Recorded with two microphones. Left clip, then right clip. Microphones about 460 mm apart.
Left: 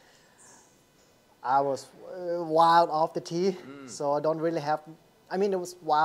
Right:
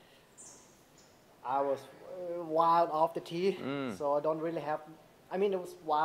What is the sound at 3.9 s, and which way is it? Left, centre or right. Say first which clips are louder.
Speech: left 6 dB; left.